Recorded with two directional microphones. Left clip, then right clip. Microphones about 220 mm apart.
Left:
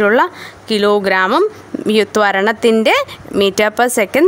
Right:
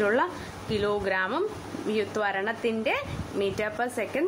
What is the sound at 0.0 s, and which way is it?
Speech, 55° left (ahead or behind).